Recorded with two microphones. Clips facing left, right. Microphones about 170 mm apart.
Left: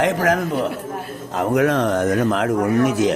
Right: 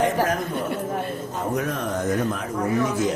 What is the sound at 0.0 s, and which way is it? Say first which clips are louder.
Speech: left 4 dB; 90° left.